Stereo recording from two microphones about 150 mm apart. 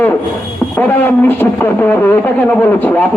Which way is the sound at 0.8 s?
10° left (ahead or behind).